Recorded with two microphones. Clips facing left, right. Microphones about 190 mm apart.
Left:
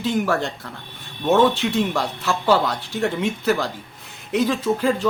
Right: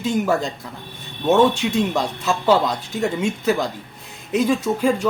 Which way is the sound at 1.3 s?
20° right (ahead or behind).